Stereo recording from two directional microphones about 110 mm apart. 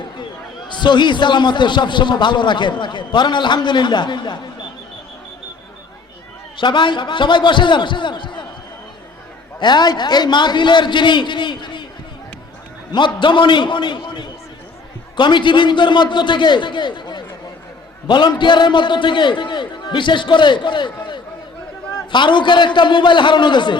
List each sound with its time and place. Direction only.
0.7 s a man's voice: 45° left (ahead or behind)
6.6 s a man's voice: 45° left (ahead or behind)
9.6 s a man's voice: 40° left (ahead or behind)
13.1 s a man's voice: 45° left (ahead or behind)